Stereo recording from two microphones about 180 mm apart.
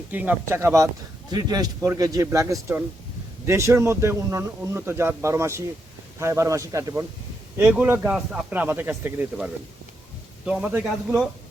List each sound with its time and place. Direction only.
0.1 s speech: 10° right (ahead or behind)